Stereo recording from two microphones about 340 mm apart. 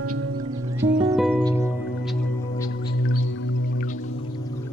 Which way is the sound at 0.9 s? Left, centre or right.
Centre.